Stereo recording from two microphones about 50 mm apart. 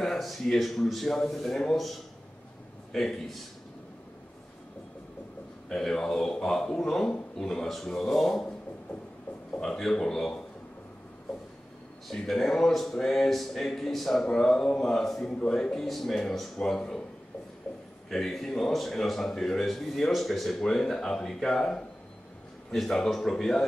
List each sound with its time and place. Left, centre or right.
0.0 s a man's voice: centre
2.9 s a man's voice: centre
5.7 s a man's voice: centre
9.6 s a man's voice: centre
12.1 s a man's voice: centre
18.1 s a man's voice: centre